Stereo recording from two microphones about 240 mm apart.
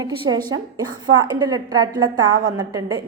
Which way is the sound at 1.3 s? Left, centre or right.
Centre.